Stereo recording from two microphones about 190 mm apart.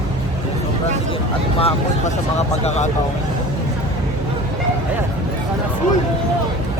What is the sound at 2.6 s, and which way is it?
Speech, 35° left (ahead or behind).